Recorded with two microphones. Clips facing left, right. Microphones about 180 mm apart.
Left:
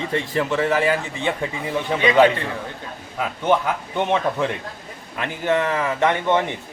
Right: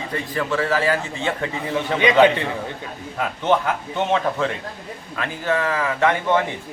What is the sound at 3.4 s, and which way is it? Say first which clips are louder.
A man's voice: even; 15° left (ahead or behind).